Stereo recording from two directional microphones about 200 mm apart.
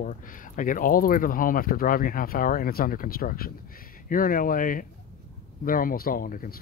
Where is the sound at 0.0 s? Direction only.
40° left (ahead or behind).